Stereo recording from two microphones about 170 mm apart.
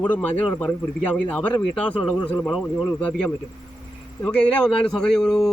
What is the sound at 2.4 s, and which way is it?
Speech, 5° right (ahead or behind).